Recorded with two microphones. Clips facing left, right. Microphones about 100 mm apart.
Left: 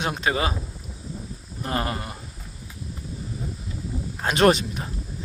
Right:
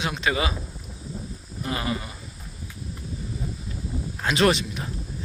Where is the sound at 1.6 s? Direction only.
45° left (ahead or behind).